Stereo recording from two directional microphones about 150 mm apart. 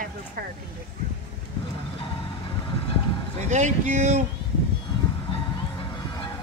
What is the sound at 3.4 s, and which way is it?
Speech, 50° right (ahead or behind).